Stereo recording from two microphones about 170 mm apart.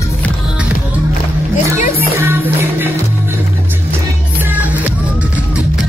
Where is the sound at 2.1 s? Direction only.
10° right (ahead or behind).